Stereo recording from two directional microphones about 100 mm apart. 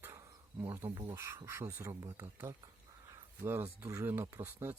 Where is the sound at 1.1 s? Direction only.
30° right (ahead or behind).